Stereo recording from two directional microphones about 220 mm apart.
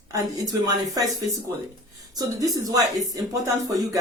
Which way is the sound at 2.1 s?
15° right (ahead or behind).